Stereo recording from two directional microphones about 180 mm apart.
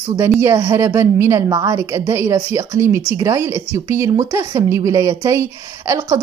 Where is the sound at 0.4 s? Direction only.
15° right (ahead or behind).